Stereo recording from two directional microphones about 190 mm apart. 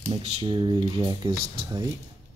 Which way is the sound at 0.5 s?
25° right (ahead or behind).